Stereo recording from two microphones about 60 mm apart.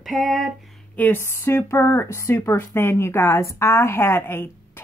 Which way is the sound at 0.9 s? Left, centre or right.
Left.